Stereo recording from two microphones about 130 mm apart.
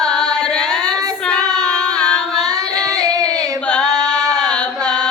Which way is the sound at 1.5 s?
5° left (ahead or behind).